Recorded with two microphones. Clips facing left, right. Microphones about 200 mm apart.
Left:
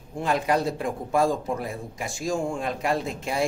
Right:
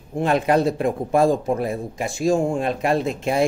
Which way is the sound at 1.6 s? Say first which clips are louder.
Right 7 dB; 25° right (ahead or behind).